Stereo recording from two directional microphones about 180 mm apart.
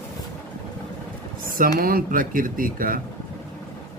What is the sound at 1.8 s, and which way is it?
Speech, 55° right (ahead or behind).